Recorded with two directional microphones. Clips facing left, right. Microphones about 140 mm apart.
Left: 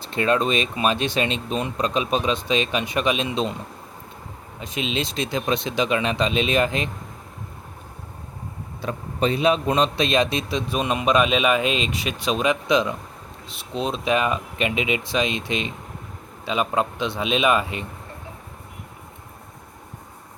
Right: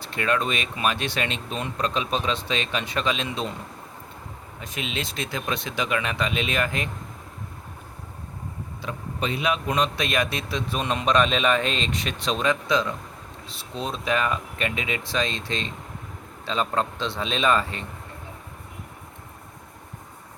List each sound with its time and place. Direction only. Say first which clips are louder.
0.0 s speech: left 4 dB; 25° left (ahead or behind)
4.6 s speech: left 5 dB; 20° left (ahead or behind)
8.8 s a man's voice: left 6 dB; 40° left (ahead or behind); by 17.8 s 15° left (ahead or behind)